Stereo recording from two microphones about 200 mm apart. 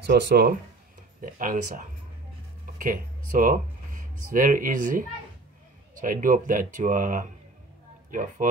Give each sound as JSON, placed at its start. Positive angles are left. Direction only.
{"t": 0.0, "sound": "speech", "side_deg": -55}
{"t": 2.6, "sound": "a sound", "side_deg": -40}
{"t": 3.3, "sound": "speech", "side_deg": -40}